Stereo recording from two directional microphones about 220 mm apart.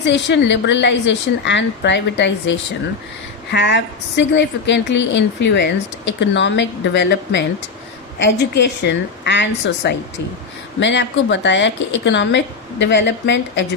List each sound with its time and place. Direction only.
0.0 s a woman's voice: 55° left (ahead or behind)